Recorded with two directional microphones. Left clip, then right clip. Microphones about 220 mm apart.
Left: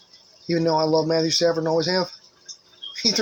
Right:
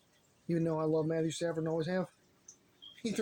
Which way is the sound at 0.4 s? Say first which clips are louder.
Left 13 dB; 10° left (ahead or behind).